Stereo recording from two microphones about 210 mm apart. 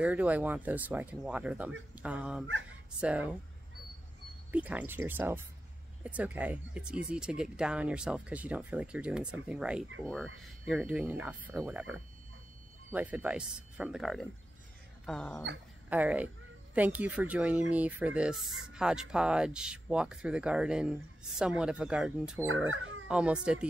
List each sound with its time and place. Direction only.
0.0 s speech: 5° right (ahead or behind)
4.5 s speech: 5° right (ahead or behind)
15.9 s speech: 5° right (ahead or behind)
22.7 s speech: 70° right (ahead or behind)
23.0 s speech: 5° right (ahead or behind)